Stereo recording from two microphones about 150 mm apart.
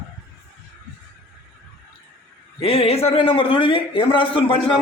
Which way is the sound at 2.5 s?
40° left (ahead or behind).